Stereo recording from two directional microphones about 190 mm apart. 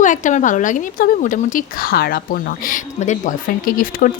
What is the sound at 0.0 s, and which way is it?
Speech, 40° left (ahead or behind).